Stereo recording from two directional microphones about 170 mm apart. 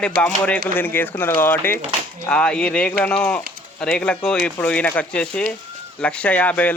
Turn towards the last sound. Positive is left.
turn(degrees=10)  # may be behind; listen again after turning